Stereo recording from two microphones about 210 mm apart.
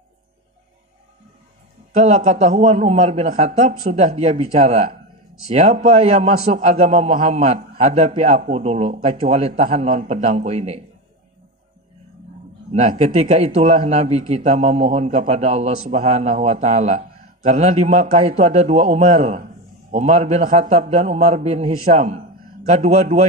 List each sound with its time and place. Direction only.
2.0 s a man's voice: 35° right (ahead or behind)
12.7 s a man's voice: 30° right (ahead or behind)